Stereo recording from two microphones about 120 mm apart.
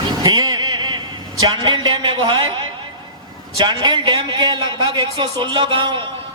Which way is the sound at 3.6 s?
40° right (ahead or behind).